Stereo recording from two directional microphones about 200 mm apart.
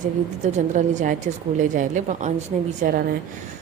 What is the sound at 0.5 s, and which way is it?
A woman's voice, 35° right (ahead or behind).